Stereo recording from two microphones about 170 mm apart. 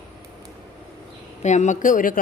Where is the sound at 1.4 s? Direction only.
45° left (ahead or behind).